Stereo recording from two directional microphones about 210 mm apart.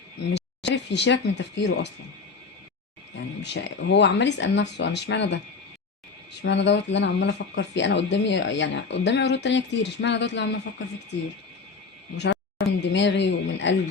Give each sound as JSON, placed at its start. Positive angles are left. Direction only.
{"t": 0.3, "sound": "speech", "side_deg": 55}
{"t": 3.4, "sound": "speech", "side_deg": 55}
{"t": 6.4, "sound": "speech", "side_deg": 55}
{"t": 12.1, "sound": "speech", "side_deg": 55}